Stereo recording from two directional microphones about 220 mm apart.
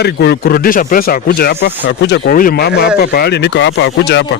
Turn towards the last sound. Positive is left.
turn(degrees=50)  # may be behind; listen again after turning